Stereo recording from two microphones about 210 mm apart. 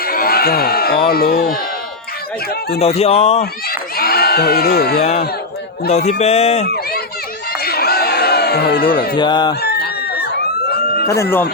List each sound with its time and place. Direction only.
0.0 s speech: 45° left (ahead or behind)
2.5 s speech: 45° left (ahead or behind)
2.8 s speech: 30° left (ahead or behind)
3.7 s speech: 45° left (ahead or behind)
5.9 s a man's voice: 30° left (ahead or behind)
7.5 s crowd: 45° left (ahead or behind)
9.1 s speech: 20° left (ahead or behind)
9.6 s a sound: 50° left (ahead or behind)
10.7 s emergency vehicle: 50° left (ahead or behind)
11.0 s speech: 15° left (ahead or behind)